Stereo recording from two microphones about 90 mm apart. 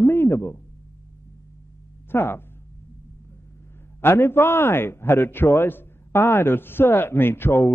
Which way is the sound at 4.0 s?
25° left (ahead or behind).